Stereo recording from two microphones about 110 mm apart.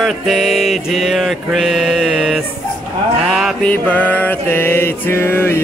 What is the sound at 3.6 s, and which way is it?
Mantra, 15° left (ahead or behind).